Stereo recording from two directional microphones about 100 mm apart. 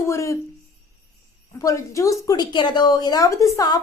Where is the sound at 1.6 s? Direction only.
35° left (ahead or behind).